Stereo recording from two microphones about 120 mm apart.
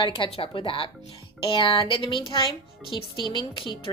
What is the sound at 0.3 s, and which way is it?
A woman's voice, 50° left (ahead or behind).